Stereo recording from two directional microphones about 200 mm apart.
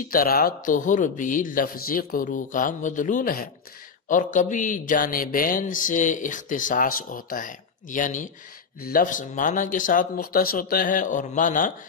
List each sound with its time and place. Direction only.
0.1 s a man's voice: 45° left (ahead or behind)